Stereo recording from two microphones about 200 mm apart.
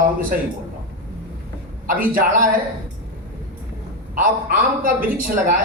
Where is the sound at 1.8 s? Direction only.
45° right (ahead or behind).